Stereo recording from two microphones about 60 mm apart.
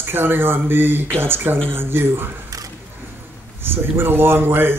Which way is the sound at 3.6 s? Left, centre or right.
Right.